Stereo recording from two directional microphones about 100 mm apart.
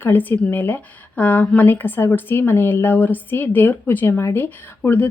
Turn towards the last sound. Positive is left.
turn(degrees=20)  # may be behind; listen again after turning